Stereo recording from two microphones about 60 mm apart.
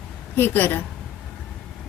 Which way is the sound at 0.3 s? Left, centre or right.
Left.